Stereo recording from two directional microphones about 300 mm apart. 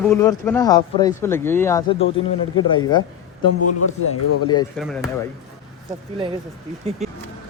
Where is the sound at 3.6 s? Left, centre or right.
Left.